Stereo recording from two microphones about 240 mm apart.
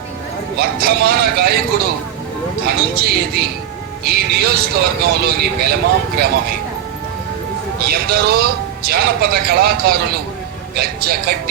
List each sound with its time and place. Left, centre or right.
0.6 s speech: right
2.6 s speech: right
7.9 s speech: right